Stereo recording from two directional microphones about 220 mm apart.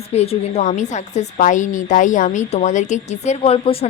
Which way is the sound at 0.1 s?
30° left (ahead or behind).